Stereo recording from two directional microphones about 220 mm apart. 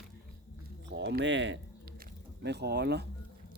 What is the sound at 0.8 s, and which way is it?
Speech, 50° right (ahead or behind).